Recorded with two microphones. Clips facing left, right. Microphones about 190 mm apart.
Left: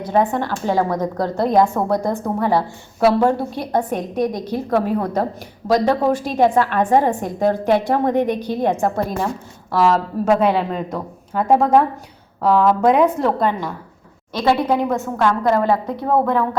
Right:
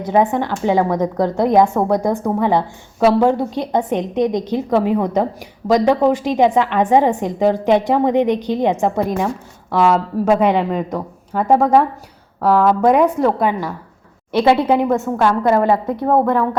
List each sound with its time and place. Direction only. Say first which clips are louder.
0.0 s a woman's voice: right 2 dB; 20° right (ahead or behind)
9.7 s a woman's voice: right 2 dB; 5° right (ahead or behind)
14.4 s a woman's voice: right 2 dB; 20° right (ahead or behind)
15.3 s a woman's voice: right 2 dB; 5° right (ahead or behind)